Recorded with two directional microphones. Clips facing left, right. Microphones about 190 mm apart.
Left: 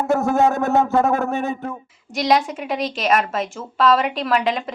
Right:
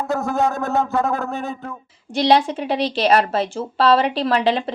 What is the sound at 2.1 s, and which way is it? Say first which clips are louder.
A woman's voice: right 2 dB; 30° right (ahead or behind).